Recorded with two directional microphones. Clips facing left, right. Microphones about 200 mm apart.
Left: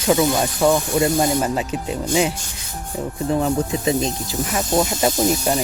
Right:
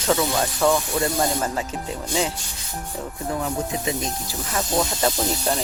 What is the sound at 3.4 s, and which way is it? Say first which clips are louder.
Speech: left 5 dB; 35° left (ahead or behind).